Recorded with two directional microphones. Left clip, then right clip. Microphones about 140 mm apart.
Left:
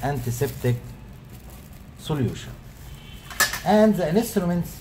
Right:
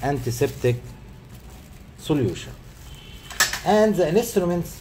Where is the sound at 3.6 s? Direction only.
25° right (ahead or behind).